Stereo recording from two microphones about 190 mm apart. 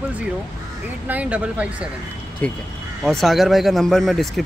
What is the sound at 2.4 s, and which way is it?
Speech, 10° left (ahead or behind).